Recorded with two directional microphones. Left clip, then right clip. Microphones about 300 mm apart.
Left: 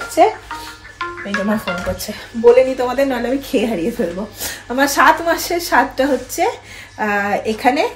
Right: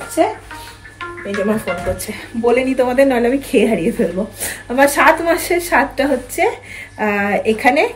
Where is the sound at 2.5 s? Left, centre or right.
Centre.